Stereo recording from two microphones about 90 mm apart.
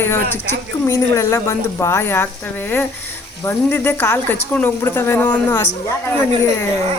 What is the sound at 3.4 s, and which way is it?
Speech, 25° left (ahead or behind).